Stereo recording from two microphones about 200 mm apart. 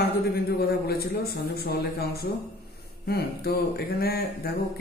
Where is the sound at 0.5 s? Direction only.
50° left (ahead or behind).